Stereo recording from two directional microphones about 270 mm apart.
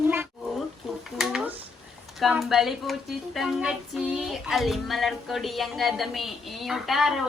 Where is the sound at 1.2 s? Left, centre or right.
Centre.